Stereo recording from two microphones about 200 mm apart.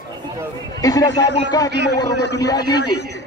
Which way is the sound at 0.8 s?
20° left (ahead or behind).